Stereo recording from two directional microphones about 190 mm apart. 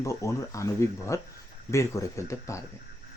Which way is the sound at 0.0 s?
15° left (ahead or behind).